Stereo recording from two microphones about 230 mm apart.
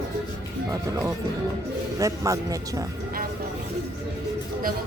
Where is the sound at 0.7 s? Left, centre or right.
Centre.